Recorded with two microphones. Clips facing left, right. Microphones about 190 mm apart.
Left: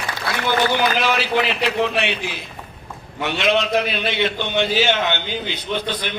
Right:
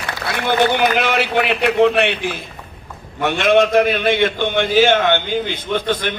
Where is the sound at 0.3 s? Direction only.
60° right (ahead or behind).